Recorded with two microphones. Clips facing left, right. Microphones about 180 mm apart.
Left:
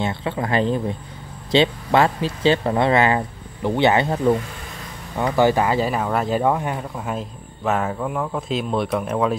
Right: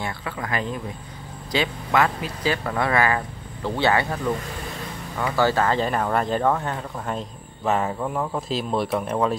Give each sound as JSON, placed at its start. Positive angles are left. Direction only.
{"t": 0.0, "sound": "speech", "side_deg": 25}